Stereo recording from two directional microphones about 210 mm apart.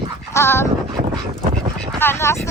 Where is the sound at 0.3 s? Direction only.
10° left (ahead or behind).